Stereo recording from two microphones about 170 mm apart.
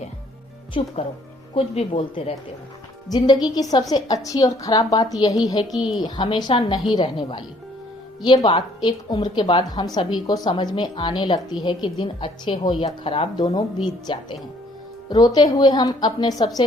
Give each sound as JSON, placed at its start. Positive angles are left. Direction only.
{"t": 0.8, "sound": "a woman's voice", "side_deg": 35}
{"t": 5.7, "sound": "a woman's voice", "side_deg": 0}
{"t": 6.0, "sound": "a woman's voice", "side_deg": 25}